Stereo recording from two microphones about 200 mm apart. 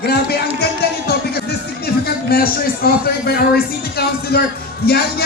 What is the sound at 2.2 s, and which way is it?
A man's voice, 50° left (ahead or behind).